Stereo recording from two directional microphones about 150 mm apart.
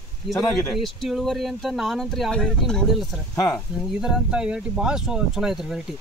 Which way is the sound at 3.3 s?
15° left (ahead or behind).